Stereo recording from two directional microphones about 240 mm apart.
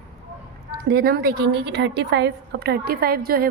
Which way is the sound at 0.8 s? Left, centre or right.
Right.